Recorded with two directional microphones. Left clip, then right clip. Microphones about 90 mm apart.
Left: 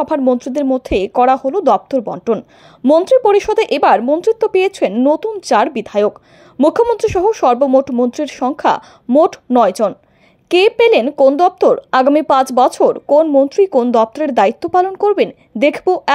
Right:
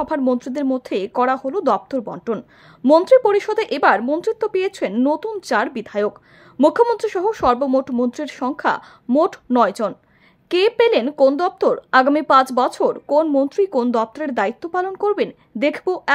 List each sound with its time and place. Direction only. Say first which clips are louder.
0.2 s speech: left 6 dB; 20° left (ahead or behind)
4.0 s a woman's voice: left 6 dB; 15° left (ahead or behind)
4.3 s speech: left 8 dB; 30° left (ahead or behind)